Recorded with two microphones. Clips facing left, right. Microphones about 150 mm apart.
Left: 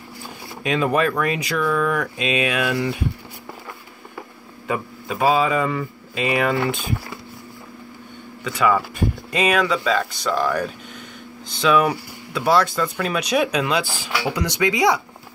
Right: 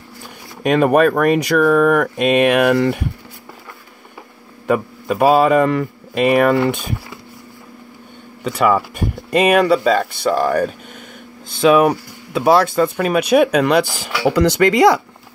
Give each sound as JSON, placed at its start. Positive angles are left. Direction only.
{"t": 0.7, "sound": "speech", "side_deg": -55}
{"t": 4.6, "sound": "speech", "side_deg": -55}
{"t": 8.5, "sound": "speech", "side_deg": -55}